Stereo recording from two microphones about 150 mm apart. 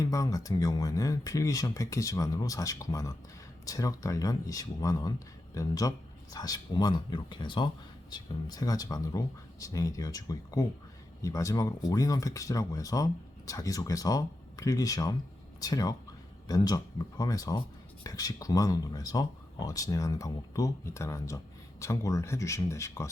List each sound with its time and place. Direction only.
0.0 s speech: 20° left (ahead or behind)